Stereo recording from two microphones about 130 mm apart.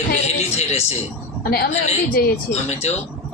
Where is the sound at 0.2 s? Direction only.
55° left (ahead or behind).